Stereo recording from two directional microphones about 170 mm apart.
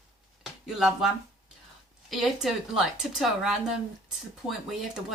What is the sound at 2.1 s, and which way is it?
Speech, centre (ahead or behind).